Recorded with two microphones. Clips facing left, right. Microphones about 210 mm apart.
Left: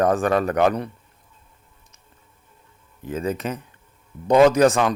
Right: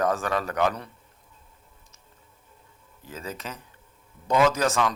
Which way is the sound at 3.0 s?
55° left (ahead or behind).